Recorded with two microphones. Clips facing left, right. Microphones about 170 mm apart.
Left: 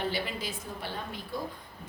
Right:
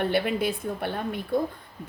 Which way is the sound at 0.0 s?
60° right (ahead or behind).